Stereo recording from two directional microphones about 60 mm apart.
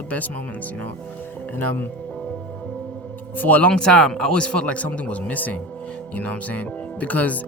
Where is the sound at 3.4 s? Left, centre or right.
Left.